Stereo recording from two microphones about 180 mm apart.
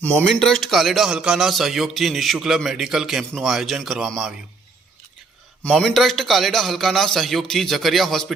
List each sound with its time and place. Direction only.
0.0 s a man's voice: 10° left (ahead or behind)
5.6 s a man's voice: centre (ahead or behind)